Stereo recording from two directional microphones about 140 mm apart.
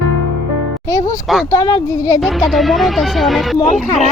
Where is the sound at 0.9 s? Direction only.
25° left (ahead or behind).